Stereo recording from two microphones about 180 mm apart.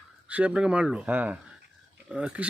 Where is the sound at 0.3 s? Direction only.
5° right (ahead or behind).